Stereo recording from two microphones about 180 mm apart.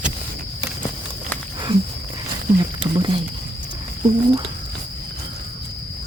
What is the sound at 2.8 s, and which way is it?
Speech, 25° right (ahead or behind).